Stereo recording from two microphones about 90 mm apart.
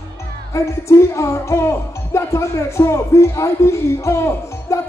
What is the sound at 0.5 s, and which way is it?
Speech, 35° left (ahead or behind).